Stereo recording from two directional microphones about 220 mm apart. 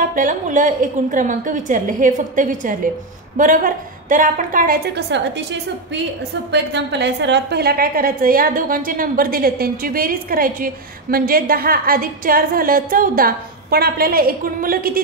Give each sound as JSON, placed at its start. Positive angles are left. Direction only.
{"t": 0.1, "sound": "a woman's voice", "side_deg": -35}
{"t": 6.5, "sound": "a woman's voice", "side_deg": -50}